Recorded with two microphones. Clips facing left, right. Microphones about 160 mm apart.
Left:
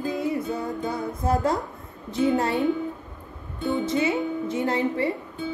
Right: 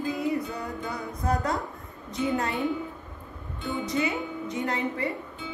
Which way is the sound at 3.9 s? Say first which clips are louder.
Left 5 dB; 25° left (ahead or behind).